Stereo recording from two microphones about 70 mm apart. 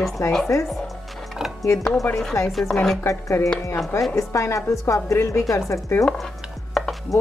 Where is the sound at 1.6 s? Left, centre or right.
Left.